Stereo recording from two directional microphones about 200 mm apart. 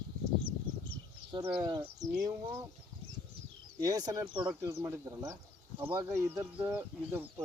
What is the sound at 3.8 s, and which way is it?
Speech, 20° right (ahead or behind).